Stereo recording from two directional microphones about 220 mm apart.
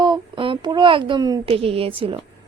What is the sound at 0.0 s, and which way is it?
A woman's voice, 20° right (ahead or behind).